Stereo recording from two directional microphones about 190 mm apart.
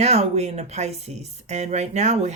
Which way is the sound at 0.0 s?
35° right (ahead or behind).